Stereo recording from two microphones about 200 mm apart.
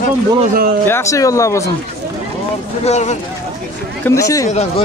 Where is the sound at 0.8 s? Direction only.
15° left (ahead or behind).